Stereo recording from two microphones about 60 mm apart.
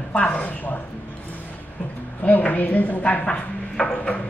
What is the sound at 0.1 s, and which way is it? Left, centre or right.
Speech, left.